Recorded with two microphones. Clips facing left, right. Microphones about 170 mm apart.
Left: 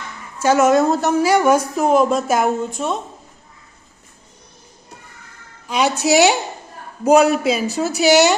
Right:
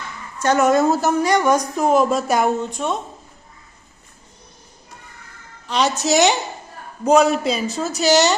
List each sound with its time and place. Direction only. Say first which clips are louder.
0.3 s a woman's voice: left 2 dB; 5° left (ahead or behind)
5.6 s speech: left 2 dB; 10° left (ahead or behind)